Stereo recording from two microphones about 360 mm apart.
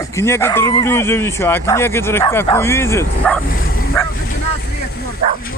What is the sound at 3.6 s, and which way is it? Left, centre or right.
Bow-wow, left.